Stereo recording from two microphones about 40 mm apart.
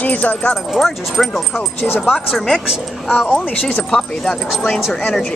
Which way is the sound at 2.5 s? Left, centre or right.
Centre.